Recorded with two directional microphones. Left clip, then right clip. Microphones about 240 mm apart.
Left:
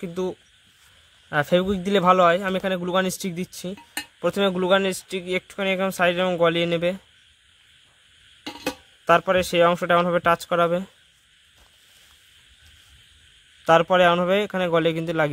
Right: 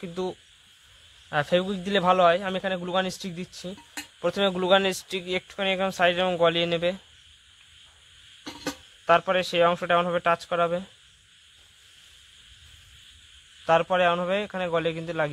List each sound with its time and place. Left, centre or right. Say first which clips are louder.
0.0 s a man's voice: left 3 dB; left
8.5 s speech: left 4 dB; left
13.7 s a man's voice: left 5 dB; left